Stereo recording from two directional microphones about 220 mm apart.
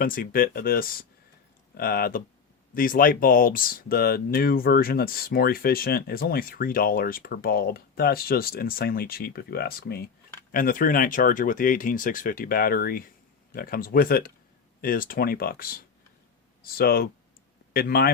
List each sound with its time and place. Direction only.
0.0 s speech: 40° left (ahead or behind)